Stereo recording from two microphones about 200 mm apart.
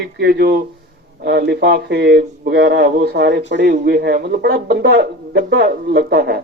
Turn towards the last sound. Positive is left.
turn(degrees=-50)  # may be behind; listen again after turning